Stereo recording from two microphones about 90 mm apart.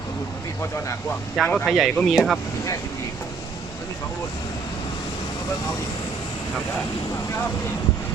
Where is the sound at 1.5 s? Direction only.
Centre (ahead or behind).